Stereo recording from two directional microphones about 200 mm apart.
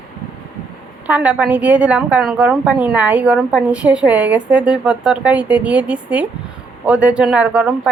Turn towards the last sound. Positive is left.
turn(degrees=-5)  # may be behind; listen again after turning